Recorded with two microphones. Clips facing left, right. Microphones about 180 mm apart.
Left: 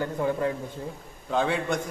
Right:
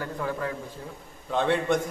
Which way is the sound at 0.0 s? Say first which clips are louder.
Left 4 dB; 25° left (ahead or behind).